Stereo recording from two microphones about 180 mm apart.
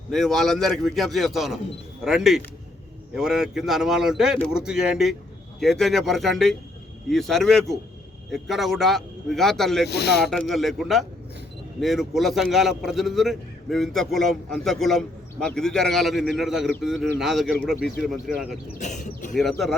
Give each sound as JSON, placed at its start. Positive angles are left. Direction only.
{"t": 0.1, "sound": "a man's voice", "side_deg": 0}
{"t": 9.9, "sound": "speech", "side_deg": 65}
{"t": 10.2, "sound": "a man's voice", "side_deg": 0}
{"t": 18.8, "sound": "speech", "side_deg": 40}
{"t": 19.3, "sound": "a man's voice", "side_deg": 0}